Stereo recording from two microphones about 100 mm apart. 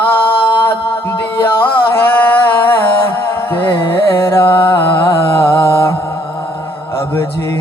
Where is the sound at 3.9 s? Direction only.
25° left (ahead or behind).